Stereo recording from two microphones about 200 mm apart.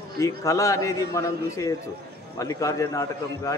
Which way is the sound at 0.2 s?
15° left (ahead or behind).